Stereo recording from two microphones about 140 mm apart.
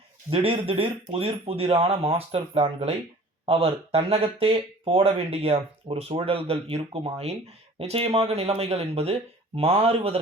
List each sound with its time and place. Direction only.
0.3 s speech: 40° right (ahead or behind)